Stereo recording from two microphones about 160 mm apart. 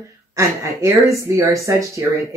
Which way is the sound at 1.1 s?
20° right (ahead or behind).